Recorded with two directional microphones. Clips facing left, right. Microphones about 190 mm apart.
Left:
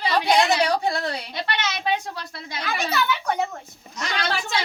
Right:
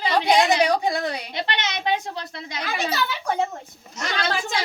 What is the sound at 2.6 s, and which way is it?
Speech, 35° right (ahead or behind).